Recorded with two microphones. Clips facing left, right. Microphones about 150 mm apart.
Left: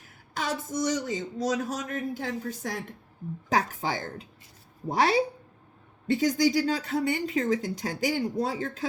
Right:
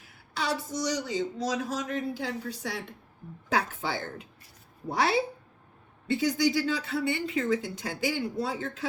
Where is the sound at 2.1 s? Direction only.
50° left (ahead or behind).